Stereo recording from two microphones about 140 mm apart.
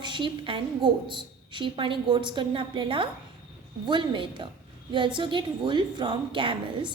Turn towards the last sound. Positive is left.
turn(degrees=-35)  # may be behind; listen again after turning